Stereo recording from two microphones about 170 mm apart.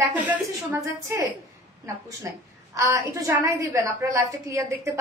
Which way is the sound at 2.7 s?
20° right (ahead or behind).